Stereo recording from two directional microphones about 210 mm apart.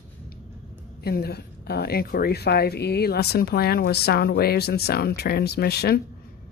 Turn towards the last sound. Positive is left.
turn(degrees=50)  # may be behind; listen again after turning